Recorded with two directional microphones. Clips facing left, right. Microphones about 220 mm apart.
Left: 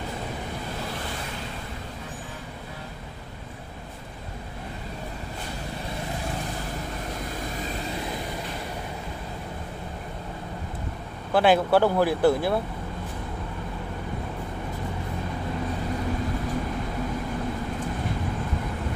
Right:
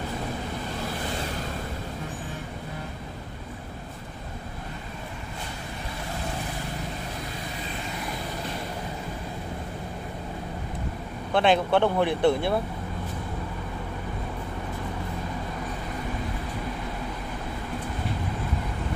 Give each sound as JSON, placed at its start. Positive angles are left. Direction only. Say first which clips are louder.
{"t": 11.3, "sound": "speech", "louder": "left 2 dB", "side_deg": 5}